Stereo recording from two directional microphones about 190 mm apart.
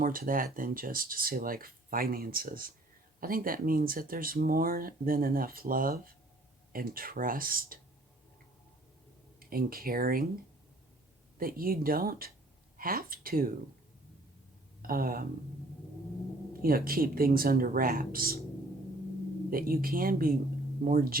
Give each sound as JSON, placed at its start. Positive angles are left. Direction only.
{"t": 0.0, "sound": "speech", "side_deg": -45}
{"t": 9.4, "sound": "speech", "side_deg": -50}
{"t": 11.3, "sound": "speech", "side_deg": -50}
{"t": 14.8, "sound": "speech", "side_deg": -50}
{"t": 16.6, "sound": "speech", "side_deg": -50}
{"t": 19.5, "sound": "speech", "side_deg": -50}